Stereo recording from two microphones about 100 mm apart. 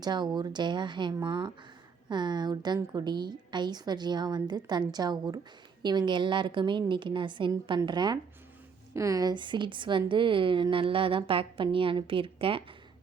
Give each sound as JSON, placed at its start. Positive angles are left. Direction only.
{"t": 0.0, "sound": "a woman's voice", "side_deg": -45}
{"t": 8.9, "sound": "a woman's voice", "side_deg": -30}